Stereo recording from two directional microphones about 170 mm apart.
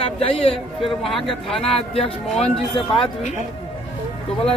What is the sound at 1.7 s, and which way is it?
Speech, 35° left (ahead or behind).